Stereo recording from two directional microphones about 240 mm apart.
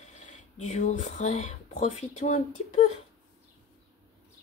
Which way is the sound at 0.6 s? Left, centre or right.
Left.